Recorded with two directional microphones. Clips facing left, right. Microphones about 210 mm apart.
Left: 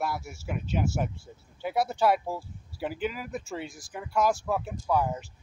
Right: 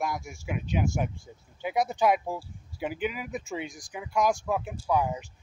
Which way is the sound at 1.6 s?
15° right (ahead or behind).